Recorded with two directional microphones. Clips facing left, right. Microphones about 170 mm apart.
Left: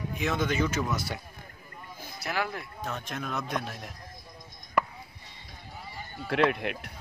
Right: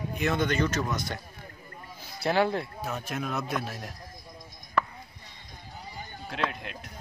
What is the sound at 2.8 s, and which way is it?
A man's voice, 5° right (ahead or behind).